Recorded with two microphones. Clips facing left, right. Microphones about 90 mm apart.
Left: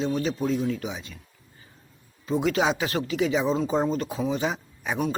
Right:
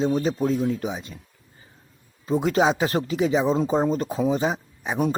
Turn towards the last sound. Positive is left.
turn(degrees=-30)  # may be behind; listen again after turning